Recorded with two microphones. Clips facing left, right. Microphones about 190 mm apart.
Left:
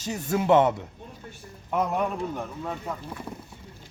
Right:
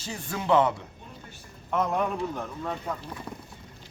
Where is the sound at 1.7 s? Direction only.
5° left (ahead or behind).